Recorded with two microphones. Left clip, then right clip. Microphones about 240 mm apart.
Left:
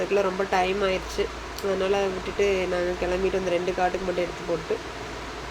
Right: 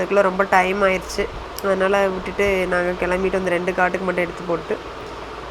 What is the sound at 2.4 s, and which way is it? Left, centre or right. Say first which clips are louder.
Speech: right 4 dB; right.